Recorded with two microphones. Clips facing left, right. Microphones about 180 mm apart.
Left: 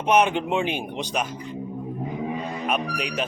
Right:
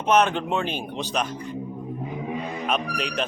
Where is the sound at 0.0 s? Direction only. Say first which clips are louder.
Even; 10° left (ahead or behind).